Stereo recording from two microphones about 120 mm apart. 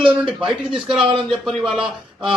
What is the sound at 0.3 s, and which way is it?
A man's voice, 5° right (ahead or behind).